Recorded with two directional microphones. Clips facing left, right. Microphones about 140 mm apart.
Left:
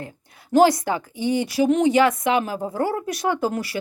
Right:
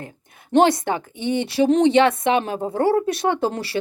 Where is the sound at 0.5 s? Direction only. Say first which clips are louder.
Even; 25° right (ahead or behind).